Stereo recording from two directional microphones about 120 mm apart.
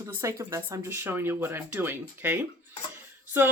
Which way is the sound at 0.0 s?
25° right (ahead or behind).